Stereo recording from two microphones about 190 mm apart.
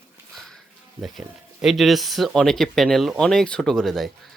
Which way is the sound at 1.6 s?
Centre (ahead or behind).